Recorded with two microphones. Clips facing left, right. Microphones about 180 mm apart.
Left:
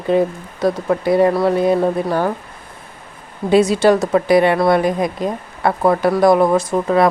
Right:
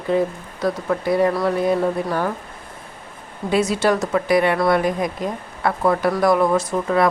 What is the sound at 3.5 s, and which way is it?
Speech, 30° left (ahead or behind).